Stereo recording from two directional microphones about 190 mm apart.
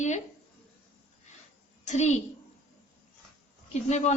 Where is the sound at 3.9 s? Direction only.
35° left (ahead or behind).